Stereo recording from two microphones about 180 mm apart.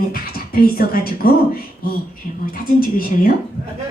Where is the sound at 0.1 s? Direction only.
55° left (ahead or behind).